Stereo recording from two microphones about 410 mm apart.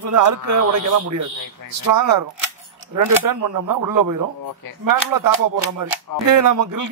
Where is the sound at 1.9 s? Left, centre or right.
Right.